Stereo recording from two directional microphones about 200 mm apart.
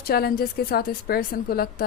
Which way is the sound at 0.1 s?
50° left (ahead or behind).